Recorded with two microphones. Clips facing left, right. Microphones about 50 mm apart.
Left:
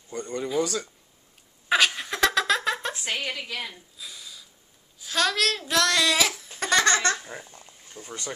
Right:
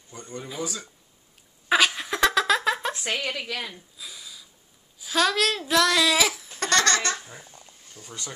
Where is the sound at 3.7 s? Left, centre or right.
Centre.